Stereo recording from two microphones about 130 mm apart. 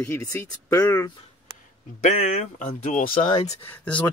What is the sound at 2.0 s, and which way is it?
Speech, 70° left (ahead or behind).